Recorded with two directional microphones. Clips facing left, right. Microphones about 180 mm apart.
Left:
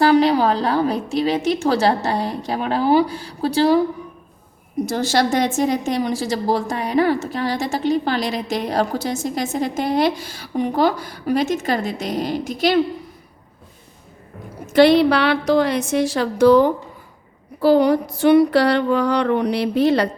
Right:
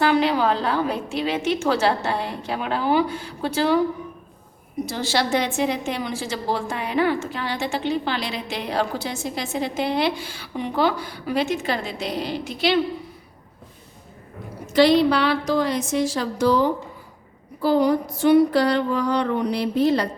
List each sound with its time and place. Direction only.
0.0 s a woman's voice: 35° left (ahead or behind)
4.9 s a woman's voice: 45° left (ahead or behind)
14.7 s a woman's voice: 60° left (ahead or behind)
17.6 s a sound: 70° left (ahead or behind)